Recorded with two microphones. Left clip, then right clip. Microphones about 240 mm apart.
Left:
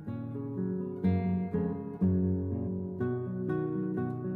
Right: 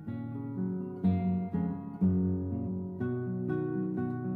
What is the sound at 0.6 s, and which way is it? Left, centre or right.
Music, left.